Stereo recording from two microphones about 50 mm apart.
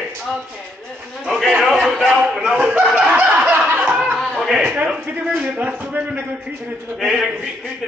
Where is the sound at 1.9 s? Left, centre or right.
Centre.